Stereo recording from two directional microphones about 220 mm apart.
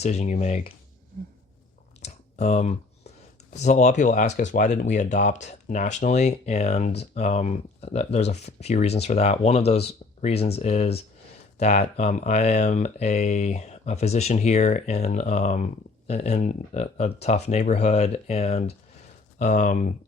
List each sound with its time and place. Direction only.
0.0 s speech: 30° left (ahead or behind)
2.0 s a sound: 30° left (ahead or behind)
3.5 s speech: 30° left (ahead or behind)